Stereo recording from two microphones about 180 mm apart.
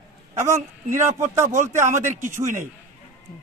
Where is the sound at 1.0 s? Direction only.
15° right (ahead or behind).